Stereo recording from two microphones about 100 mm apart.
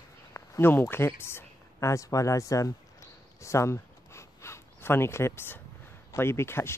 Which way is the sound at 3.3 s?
30° left (ahead or behind).